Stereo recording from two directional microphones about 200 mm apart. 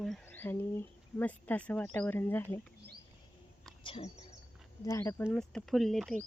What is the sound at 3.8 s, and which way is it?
Speech, 30° left (ahead or behind).